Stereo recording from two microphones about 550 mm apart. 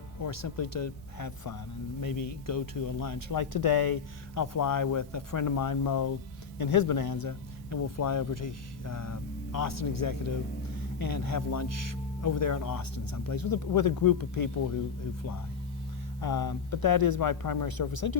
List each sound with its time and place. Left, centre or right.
0.2 s speech: left
16.2 s speech: left